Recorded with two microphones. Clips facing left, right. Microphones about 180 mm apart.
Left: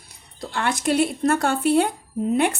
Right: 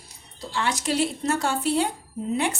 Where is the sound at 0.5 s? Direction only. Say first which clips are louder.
Left 4 dB; 55° left (ahead or behind).